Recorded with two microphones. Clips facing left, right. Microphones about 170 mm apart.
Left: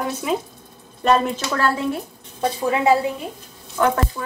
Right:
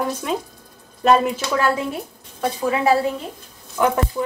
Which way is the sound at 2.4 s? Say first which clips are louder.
Even; 20° left (ahead or behind).